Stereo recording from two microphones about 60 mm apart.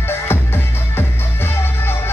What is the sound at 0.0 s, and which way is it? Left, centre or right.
Music, left.